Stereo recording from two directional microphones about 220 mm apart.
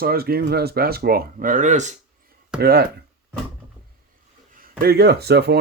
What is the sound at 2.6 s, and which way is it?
Speech, 45° right (ahead or behind).